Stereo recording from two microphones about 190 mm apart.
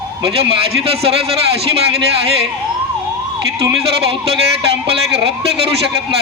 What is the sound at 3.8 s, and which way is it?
Speech, 30° right (ahead or behind).